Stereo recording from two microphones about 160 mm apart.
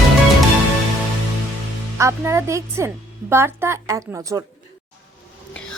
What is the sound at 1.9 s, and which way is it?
Speech, 20° right (ahead or behind).